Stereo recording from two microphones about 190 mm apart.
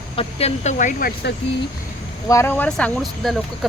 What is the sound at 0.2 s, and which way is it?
Speech, 30° left (ahead or behind).